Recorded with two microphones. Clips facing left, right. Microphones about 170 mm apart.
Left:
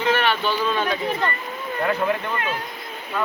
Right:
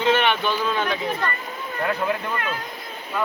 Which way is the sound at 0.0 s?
20° right (ahead or behind).